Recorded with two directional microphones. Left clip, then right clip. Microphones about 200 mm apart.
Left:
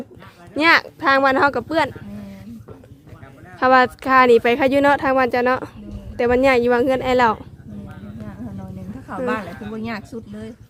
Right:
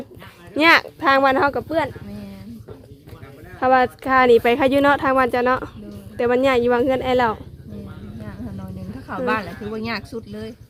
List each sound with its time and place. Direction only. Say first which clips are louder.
0.5 s speech: right 1 dB; centre (ahead or behind); by 1.9 s 15° left (ahead or behind)
3.6 s speech: left 2 dB; 10° left (ahead or behind)
9.0 s speech: right 1 dB; 15° right (ahead or behind)